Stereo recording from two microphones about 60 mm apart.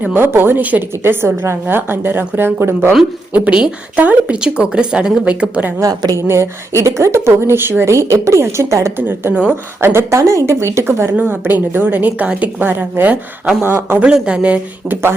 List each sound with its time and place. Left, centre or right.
0.0 s speech: right
3.3 s a woman's voice: right
5.8 s a woman's voice: right
6.1 s speech: right
9.0 s speech: right
9.3 s a woman's voice: right
9.8 s speech: right
11.2 s a woman's voice: right
13.6 s speech: right
14.0 s a woman's voice: centre